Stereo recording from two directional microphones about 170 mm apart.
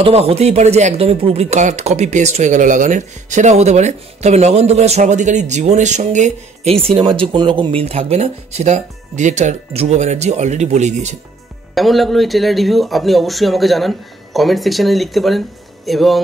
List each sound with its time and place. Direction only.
0.0 s speech: 35° right (ahead or behind)
11.7 s speech: centre (ahead or behind)